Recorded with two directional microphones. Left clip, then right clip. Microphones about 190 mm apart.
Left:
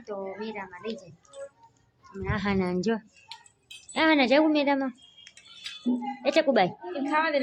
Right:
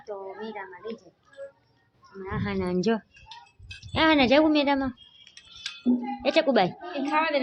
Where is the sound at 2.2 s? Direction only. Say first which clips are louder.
Left 3 dB; 55° left (ahead or behind).